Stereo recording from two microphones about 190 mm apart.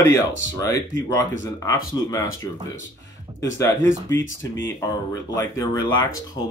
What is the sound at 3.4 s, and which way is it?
Speech, 15° left (ahead or behind).